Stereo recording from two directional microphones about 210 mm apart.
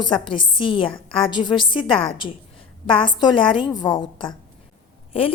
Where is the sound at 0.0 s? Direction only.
25° left (ahead or behind).